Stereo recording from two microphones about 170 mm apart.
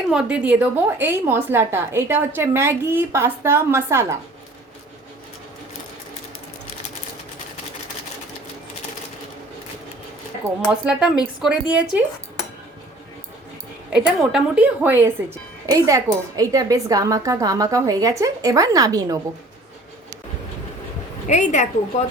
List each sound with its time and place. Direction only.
0.1 s a woman's voice: 5° right (ahead or behind)
10.7 s speech: 5° right (ahead or behind)
13.9 s a woman's voice: 5° right (ahead or behind); by 19.2 s 20° right (ahead or behind)
21.2 s a woman's voice: 45° left (ahead or behind)